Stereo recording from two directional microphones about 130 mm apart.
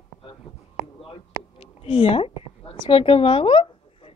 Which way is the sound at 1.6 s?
45° left (ahead or behind).